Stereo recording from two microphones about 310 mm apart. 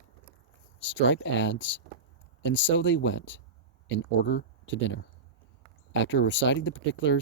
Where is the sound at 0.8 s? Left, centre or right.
Left.